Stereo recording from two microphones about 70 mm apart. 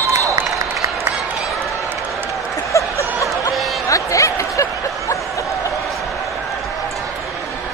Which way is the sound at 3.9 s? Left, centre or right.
Left.